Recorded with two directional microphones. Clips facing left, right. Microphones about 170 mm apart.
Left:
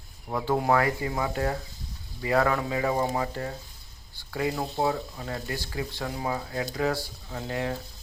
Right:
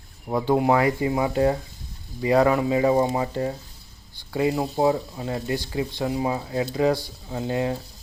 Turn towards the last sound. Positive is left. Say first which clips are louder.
# right 6 dB
turn(degrees=-25)  # may be behind; listen again after turning